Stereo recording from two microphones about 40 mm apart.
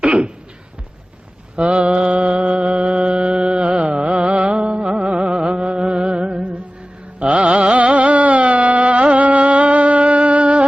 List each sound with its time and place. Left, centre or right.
0.0 s a sound: right
1.5 s mantra: right
3.8 s carnatic music: right
4.6 s music: right
7.2 s carnatic music: right